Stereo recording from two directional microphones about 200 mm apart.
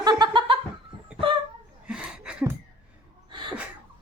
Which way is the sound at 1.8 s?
5° right (ahead or behind).